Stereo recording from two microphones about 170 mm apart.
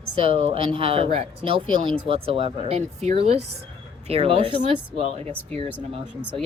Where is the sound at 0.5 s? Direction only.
30° right (ahead or behind).